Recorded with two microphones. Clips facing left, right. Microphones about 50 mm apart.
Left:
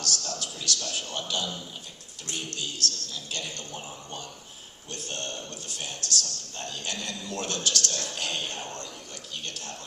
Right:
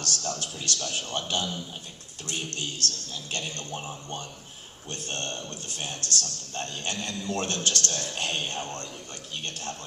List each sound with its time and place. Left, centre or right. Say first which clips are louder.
0.0 s a man's voice: right 1 dB; right